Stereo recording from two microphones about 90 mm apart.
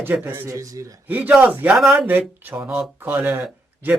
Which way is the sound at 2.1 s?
20° right (ahead or behind).